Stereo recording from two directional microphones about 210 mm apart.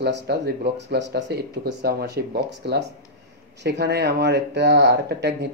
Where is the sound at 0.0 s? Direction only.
50° right (ahead or behind).